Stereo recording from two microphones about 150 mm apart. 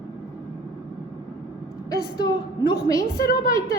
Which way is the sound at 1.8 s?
25° left (ahead or behind).